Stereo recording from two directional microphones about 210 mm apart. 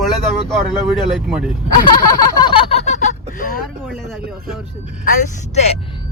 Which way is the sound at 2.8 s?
35° left (ahead or behind).